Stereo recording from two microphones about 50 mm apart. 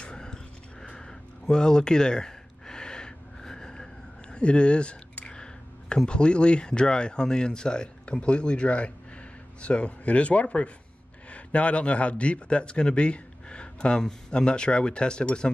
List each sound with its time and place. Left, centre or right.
0.0 s a sound: centre
1.5 s gasp: centre
6.0 s a man's voice: centre